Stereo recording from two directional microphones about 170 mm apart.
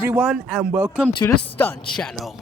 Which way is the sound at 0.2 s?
Centre (ahead or behind).